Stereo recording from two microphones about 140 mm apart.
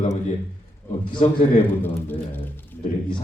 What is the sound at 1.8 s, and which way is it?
Speech, 15° left (ahead or behind).